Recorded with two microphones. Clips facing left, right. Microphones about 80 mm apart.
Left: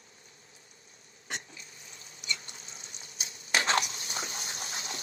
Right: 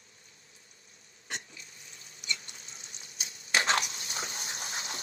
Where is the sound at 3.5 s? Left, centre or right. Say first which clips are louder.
Even; left.